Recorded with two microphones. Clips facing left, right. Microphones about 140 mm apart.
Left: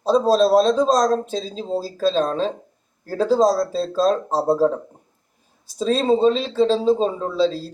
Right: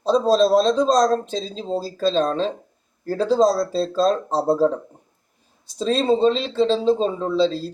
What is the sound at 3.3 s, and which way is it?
Speech, 40° left (ahead or behind).